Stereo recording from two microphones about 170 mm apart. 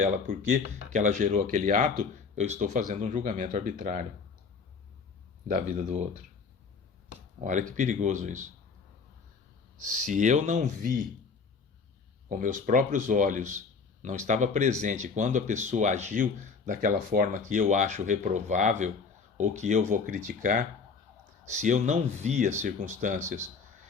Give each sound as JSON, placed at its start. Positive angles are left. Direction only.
{"t": 0.0, "sound": "speech", "side_deg": -55}
{"t": 5.5, "sound": "speech", "side_deg": -50}
{"t": 7.8, "sound": "speech", "side_deg": -45}
{"t": 9.9, "sound": "speech", "side_deg": -45}
{"t": 12.3, "sound": "speech", "side_deg": -50}